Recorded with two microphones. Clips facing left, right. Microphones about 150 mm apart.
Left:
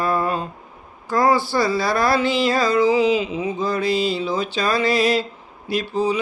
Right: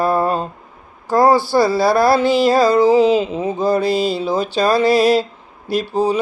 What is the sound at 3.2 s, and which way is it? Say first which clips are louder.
Speech: right 4 dB; 50° right (ahead or behind).